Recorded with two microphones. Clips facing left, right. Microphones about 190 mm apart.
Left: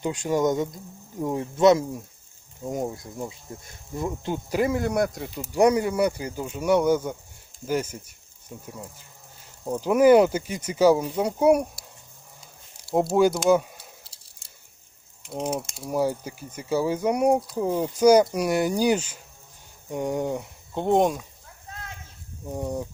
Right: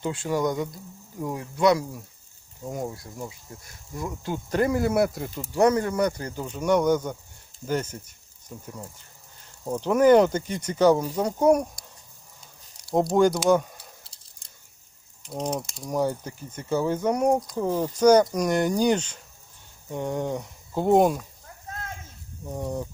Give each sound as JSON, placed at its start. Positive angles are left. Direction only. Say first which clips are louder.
{"t": 0.0, "sound": "speech", "louder": "left 2 dB", "side_deg": 15}
{"t": 4.4, "sound": "speech", "louder": "right 1 dB", "side_deg": 5}
{"t": 5.4, "sound": "coin", "louder": "left 1 dB", "side_deg": 10}
{"t": 7.7, "sound": "speech", "louder": "left 1 dB", "side_deg": 10}
{"t": 9.6, "sound": "coin", "louder": "left 1 dB", "side_deg": 5}
{"t": 12.7, "sound": "speech", "louder": "even", "side_deg": 5}
{"t": 15.3, "sound": "speech", "louder": "left 1 dB", "side_deg": 5}
{"t": 15.7, "sound": "coin", "louder": "left 1 dB", "side_deg": 5}
{"t": 20.7, "sound": "speech", "louder": "right 2 dB", "side_deg": -5}
{"t": 21.7, "sound": "a sound", "louder": "right 4 dB", "side_deg": -45}
{"t": 22.5, "sound": "coin", "louder": "left 1 dB", "side_deg": 10}